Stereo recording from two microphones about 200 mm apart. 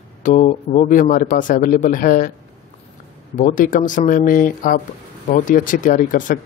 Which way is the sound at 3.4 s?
40° left (ahead or behind).